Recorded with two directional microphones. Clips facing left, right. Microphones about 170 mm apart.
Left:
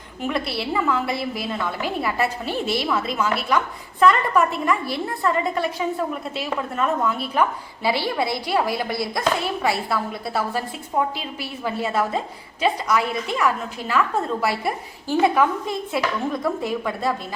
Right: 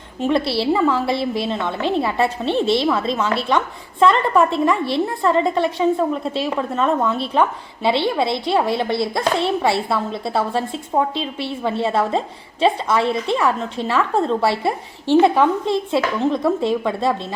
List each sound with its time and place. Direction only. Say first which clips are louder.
0.2 s a woman's voice: right 7 dB; 30° right (ahead or behind)